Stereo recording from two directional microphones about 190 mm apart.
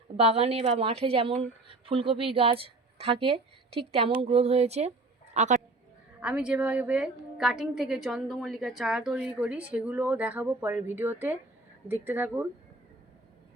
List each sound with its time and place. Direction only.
0.2 s a woman's voice: 30° right (ahead or behind)
6.1 s a woman's voice: 5° right (ahead or behind)